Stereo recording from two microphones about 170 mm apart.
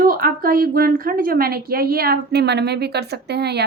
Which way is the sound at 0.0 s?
60° right (ahead or behind).